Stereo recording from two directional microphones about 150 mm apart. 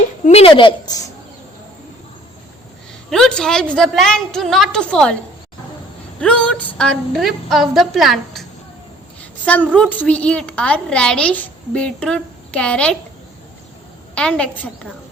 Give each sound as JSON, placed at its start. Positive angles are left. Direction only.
{"t": 0.3, "sound": "a woman's voice", "side_deg": 40}
{"t": 3.1, "sound": "a woman's voice", "side_deg": 5}
{"t": 6.1, "sound": "a woman's voice", "side_deg": 5}
{"t": 14.2, "sound": "a woman's voice", "side_deg": 5}